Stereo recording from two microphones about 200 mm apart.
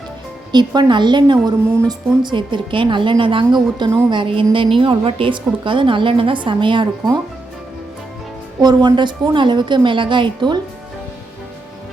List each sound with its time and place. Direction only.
0.5 s a woman's voice: 20° right (ahead or behind)
8.6 s a woman's voice: 20° right (ahead or behind)